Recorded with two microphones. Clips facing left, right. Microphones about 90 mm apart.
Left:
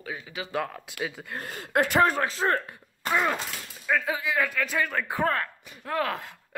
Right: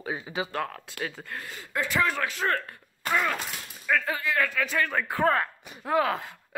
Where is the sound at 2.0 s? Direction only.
35° left (ahead or behind).